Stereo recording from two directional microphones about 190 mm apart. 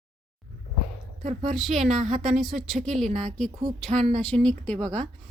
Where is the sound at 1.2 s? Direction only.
40° right (ahead or behind).